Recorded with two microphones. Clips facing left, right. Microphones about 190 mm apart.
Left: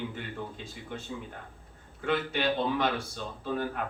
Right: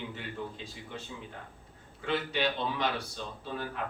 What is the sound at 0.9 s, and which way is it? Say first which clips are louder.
Speech: left 6 dB; 55° left (ahead or behind).